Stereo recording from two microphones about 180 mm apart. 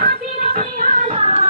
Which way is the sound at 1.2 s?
40° right (ahead or behind).